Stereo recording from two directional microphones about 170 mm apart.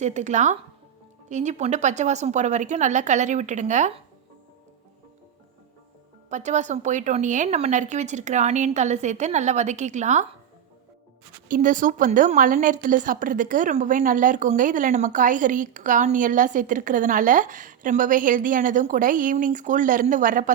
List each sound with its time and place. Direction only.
0.0 s a woman's voice: 45° right (ahead or behind)
6.3 s a woman's voice: 45° right (ahead or behind)
11.4 s a woman's voice: 50° right (ahead or behind)